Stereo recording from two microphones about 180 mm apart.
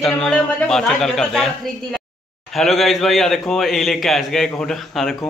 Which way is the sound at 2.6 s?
Centre (ahead or behind).